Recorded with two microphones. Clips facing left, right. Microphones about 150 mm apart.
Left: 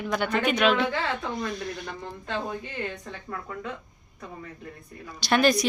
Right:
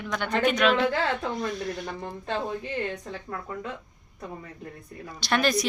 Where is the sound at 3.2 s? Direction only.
5° right (ahead or behind).